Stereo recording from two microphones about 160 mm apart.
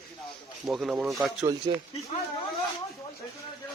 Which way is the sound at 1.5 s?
20° right (ahead or behind).